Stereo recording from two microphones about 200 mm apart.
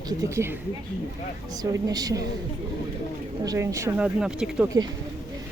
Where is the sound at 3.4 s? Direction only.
15° right (ahead or behind).